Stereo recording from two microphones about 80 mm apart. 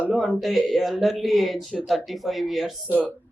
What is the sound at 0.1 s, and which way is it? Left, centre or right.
Speech, centre.